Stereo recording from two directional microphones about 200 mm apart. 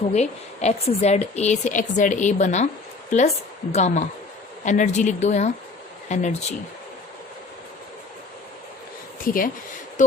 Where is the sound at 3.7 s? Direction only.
35° left (ahead or behind).